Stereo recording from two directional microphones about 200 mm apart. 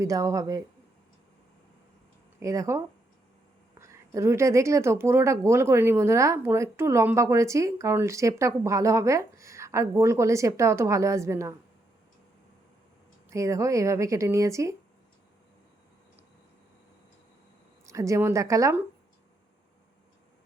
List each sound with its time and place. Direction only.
0.0 s speech: 15° right (ahead or behind)
2.4 s speech: 15° right (ahead or behind)
13.3 s speech: 15° right (ahead or behind)
17.8 s speech: 15° right (ahead or behind)